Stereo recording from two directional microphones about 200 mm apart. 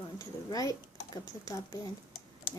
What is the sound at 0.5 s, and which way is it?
Speech, 15° left (ahead or behind).